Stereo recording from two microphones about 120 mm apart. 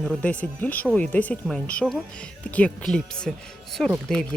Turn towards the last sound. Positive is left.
turn(degrees=5)  # may be behind; listen again after turning